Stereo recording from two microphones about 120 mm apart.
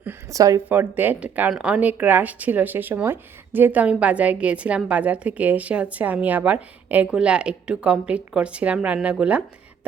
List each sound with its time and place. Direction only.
0.3 s a woman's voice: 30° right (ahead or behind)
0.7 s speech: 15° right (ahead or behind)